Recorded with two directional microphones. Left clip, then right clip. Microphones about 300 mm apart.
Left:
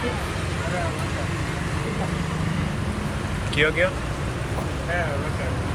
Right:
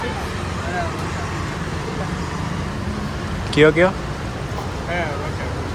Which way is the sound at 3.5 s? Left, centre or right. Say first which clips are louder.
Right 7 dB; centre.